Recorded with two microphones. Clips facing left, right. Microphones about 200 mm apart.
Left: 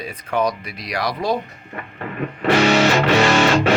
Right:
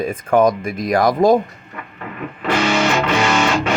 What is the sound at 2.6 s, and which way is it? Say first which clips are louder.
Music: left 1 dB; 40° left (ahead or behind).